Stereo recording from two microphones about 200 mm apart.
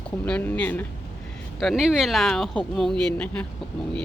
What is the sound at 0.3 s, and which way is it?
Speech, 5° left (ahead or behind).